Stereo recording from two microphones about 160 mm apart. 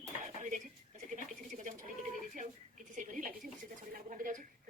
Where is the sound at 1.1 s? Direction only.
55° right (ahead or behind).